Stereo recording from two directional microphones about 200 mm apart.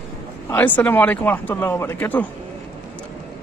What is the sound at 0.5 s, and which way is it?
Speech, 10° left (ahead or behind).